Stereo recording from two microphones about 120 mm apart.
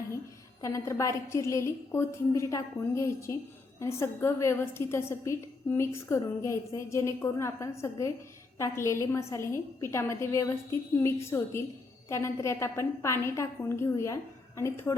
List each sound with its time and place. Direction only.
0.6 s a woman's voice: 25° left (ahead or behind)